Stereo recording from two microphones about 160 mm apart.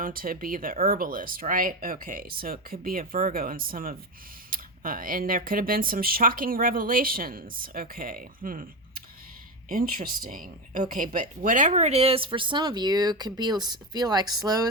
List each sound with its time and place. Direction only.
0.0 s speech: 65° right (ahead or behind)
9.6 s speech: 60° right (ahead or behind); by 14.7 s 25° right (ahead or behind)